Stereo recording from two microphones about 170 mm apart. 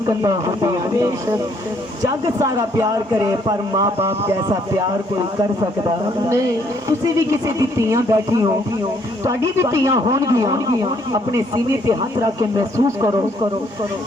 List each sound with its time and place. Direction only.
0.0 s a man's voice: 20° right (ahead or behind)
6.8 s a man's voice: 20° right (ahead or behind)